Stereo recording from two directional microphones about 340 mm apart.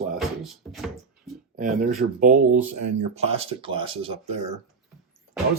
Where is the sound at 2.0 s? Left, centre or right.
Right.